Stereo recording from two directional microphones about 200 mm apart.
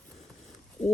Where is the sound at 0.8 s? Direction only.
35° left (ahead or behind).